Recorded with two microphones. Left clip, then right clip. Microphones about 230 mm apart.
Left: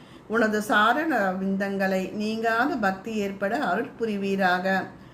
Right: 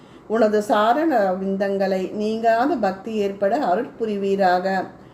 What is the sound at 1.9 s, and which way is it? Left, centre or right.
Speech, left.